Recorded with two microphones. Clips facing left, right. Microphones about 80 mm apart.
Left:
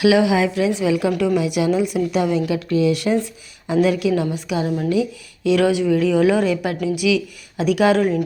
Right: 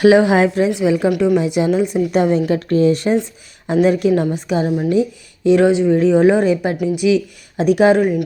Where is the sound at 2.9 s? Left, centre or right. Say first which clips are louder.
Right 3 dB; right.